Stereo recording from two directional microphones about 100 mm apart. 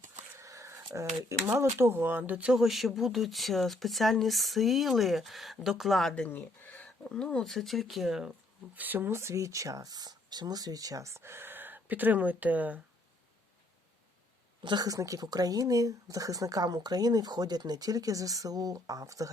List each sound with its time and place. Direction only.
0.3 s a sound: 30° right (ahead or behind)
0.9 s speech: 30° right (ahead or behind); by 6.2 s 5° left (ahead or behind)
6.2 s speech: 20° left (ahead or behind); by 8.3 s 5° right (ahead or behind)
8.7 s speech: 20° right (ahead or behind)
14.6 s speech: 45° right (ahead or behind)